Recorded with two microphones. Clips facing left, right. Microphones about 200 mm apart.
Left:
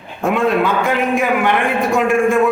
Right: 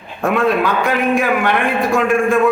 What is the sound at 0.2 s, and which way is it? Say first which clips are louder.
A man's voice: even; 20° left (ahead or behind).